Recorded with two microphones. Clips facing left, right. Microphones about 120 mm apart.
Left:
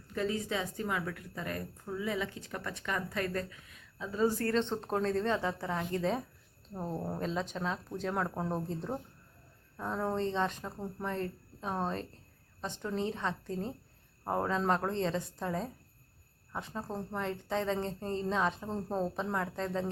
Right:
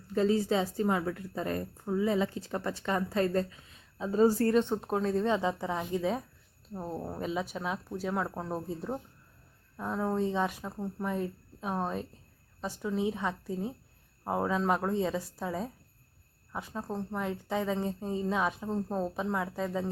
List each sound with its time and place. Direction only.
0.1 s a woman's voice: 30° right (ahead or behind)
4.4 s a woman's voice: 10° right (ahead or behind)